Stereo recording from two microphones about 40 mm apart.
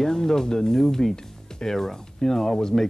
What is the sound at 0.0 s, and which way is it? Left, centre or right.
Speech, centre.